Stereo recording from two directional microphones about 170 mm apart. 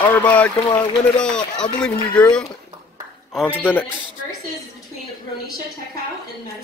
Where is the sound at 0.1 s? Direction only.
10° left (ahead or behind).